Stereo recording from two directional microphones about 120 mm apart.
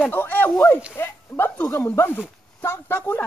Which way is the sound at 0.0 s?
15° left (ahead or behind).